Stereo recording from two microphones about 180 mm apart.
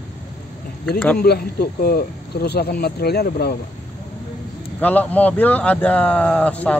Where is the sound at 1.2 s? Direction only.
60° left (ahead or behind).